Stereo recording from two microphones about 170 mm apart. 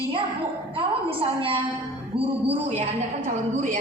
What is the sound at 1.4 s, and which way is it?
Speech, 30° right (ahead or behind).